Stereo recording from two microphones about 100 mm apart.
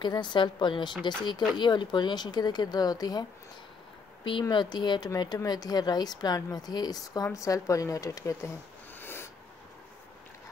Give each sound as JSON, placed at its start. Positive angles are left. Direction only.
{"t": 0.0, "sound": "speech", "side_deg": 50}
{"t": 4.2, "sound": "speech", "side_deg": 55}
{"t": 9.0, "sound": "a sound", "side_deg": 25}